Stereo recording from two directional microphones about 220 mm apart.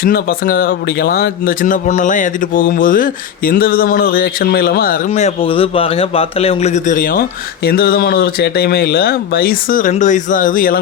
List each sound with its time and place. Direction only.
0.0 s speech: 40° left (ahead or behind)